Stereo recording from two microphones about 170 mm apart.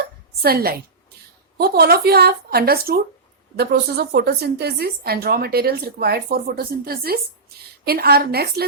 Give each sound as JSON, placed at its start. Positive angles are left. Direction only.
{"t": 0.4, "sound": "a woman's voice", "side_deg": -65}